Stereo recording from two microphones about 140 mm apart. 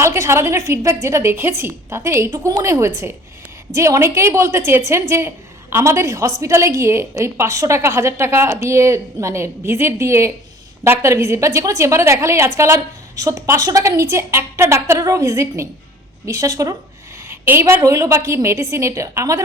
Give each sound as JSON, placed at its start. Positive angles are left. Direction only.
{"t": 0.0, "sound": "a woman's voice", "side_deg": -20}